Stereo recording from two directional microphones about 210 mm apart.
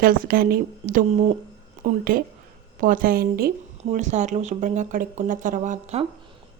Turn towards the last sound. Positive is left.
turn(degrees=-35)  # may be behind; listen again after turning